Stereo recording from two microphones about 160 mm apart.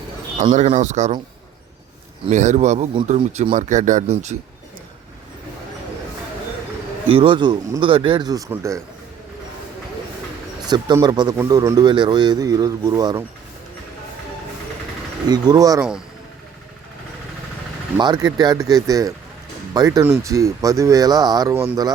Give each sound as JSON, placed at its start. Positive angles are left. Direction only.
{"t": 0.3, "sound": "speech", "side_deg": -50}
{"t": 2.3, "sound": "speech", "side_deg": -50}
{"t": 7.1, "sound": "speech", "side_deg": -35}
{"t": 10.6, "sound": "a sound", "side_deg": -25}
{"t": 11.0, "sound": "speech", "side_deg": -25}
{"t": 15.3, "sound": "speech", "side_deg": -25}
{"t": 17.9, "sound": "speech", "side_deg": -25}
{"t": 21.5, "sound": "speech", "side_deg": -10}